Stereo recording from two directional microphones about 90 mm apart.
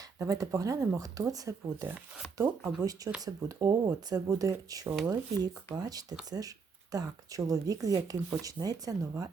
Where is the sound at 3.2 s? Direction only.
40° right (ahead or behind).